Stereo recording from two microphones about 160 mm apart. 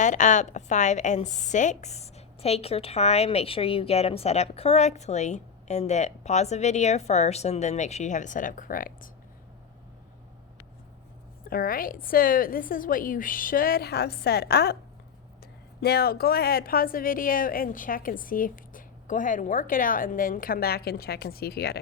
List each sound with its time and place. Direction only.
0.0 s a woman's voice: 50° left (ahead or behind)
11.4 s a woman's voice: 65° left (ahead or behind); by 14.8 s 90° left
15.8 s a woman's voice: 80° left